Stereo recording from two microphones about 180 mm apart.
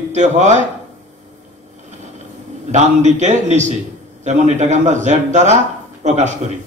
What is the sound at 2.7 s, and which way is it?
A man's voice, 40° right (ahead or behind).